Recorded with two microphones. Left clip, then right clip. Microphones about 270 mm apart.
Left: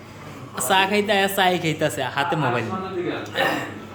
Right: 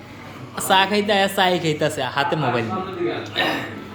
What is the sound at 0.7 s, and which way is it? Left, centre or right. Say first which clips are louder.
A woman's voice: right 2 dB; centre.